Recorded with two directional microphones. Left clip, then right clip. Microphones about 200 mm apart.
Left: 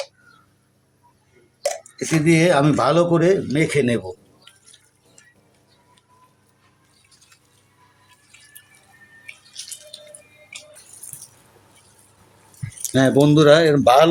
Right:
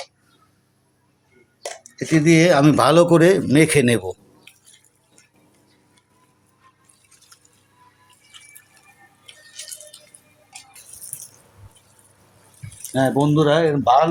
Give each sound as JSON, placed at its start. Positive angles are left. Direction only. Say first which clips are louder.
{"t": 2.0, "sound": "speech", "louder": "right 3 dB", "side_deg": -15}
{"t": 12.9, "sound": "speech", "louder": "left 3 dB", "side_deg": 15}